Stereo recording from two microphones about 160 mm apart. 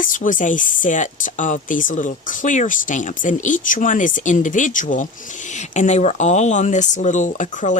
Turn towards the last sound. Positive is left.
turn(degrees=55)  # may be behind; listen again after turning